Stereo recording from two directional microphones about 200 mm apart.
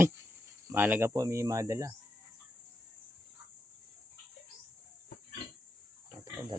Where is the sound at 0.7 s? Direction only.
10° right (ahead or behind).